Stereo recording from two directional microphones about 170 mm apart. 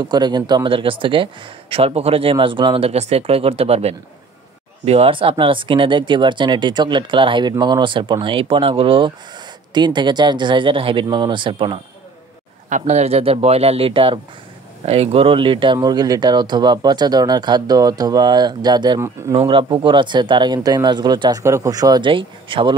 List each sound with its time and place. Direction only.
0.0 s speech: 25° right (ahead or behind)
12.6 s speech: 45° right (ahead or behind); by 19.3 s 15° right (ahead or behind)
19.3 s speech: 30° right (ahead or behind)